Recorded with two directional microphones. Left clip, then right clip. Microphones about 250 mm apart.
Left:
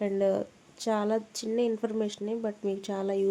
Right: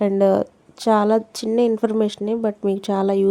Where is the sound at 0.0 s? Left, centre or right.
Right.